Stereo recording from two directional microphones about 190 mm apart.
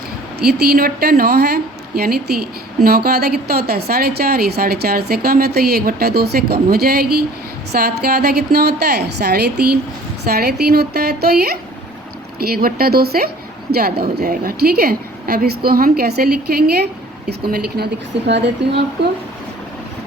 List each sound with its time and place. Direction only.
0.3 s a woman's voice: 55° right (ahead or behind)